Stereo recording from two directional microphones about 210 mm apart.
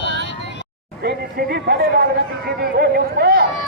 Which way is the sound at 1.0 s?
50° right (ahead or behind).